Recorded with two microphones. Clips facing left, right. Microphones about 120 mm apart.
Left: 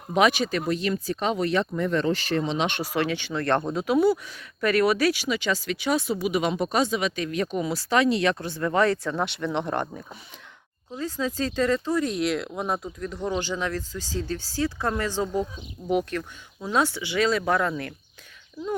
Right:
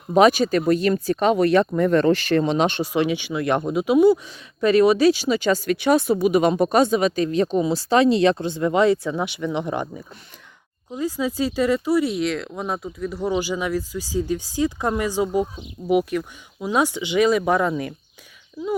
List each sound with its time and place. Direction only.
0.1 s speech: 40° right (ahead or behind)
2.8 s speech: 20° right (ahead or behind); by 7.3 s 45° right (ahead or behind)
7.3 s speech: 30° right (ahead or behind); by 10.2 s centre (ahead or behind)
10.9 s speech: 10° right (ahead or behind)